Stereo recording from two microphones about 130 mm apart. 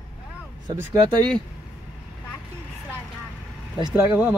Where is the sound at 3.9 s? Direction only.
10° right (ahead or behind).